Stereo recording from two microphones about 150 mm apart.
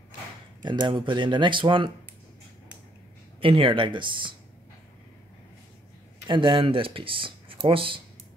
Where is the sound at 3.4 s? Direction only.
35° right (ahead or behind).